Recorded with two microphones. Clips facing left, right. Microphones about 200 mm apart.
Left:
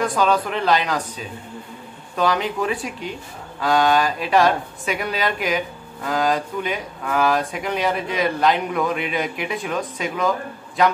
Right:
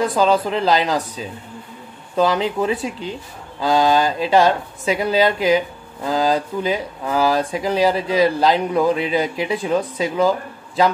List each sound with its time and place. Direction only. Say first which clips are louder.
0.0 s speech: right 3 dB; 30° right (ahead or behind)